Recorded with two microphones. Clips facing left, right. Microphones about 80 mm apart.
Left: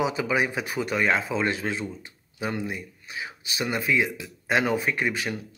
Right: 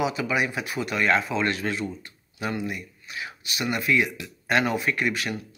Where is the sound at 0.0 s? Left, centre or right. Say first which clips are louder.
Left 1 dB; left.